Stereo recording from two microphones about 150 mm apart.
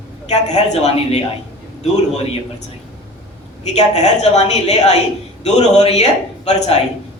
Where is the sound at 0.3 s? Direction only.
50° left (ahead or behind).